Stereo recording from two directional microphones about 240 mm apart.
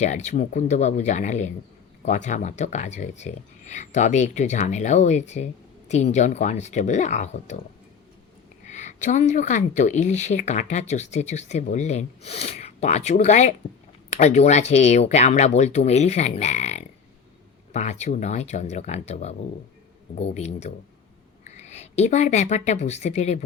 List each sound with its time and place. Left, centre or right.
0.0 s speech: left
8.6 s speech: left